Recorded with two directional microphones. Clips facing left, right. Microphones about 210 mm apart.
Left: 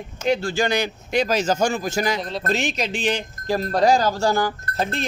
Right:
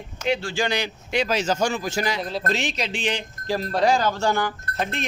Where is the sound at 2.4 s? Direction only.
45° left (ahead or behind).